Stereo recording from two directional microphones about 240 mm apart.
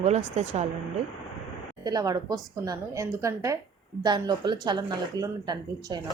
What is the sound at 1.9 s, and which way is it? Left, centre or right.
Speech, centre.